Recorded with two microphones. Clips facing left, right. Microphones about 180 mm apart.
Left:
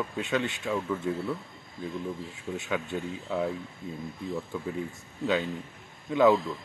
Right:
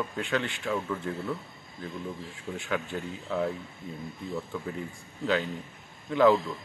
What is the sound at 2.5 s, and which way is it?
Speech, 15° left (ahead or behind).